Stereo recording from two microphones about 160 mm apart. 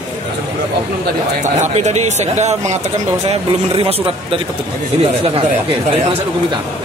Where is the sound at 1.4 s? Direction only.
45° right (ahead or behind).